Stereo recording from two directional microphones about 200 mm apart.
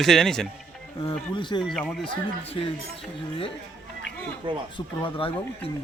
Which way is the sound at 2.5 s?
25° left (ahead or behind).